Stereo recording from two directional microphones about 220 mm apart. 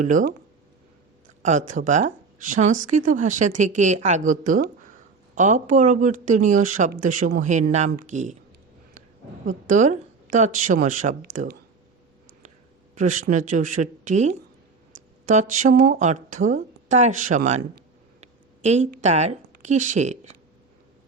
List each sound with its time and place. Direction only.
0.0 s speech: 35° right (ahead or behind)
1.4 s speech: 35° right (ahead or behind)
9.5 s speech: 35° right (ahead or behind)
13.0 s speech: 35° right (ahead or behind)
15.4 s speech: 35° right (ahead or behind)
18.2 s a sound: 30° right (ahead or behind)
19.0 s speech: 30° right (ahead or behind)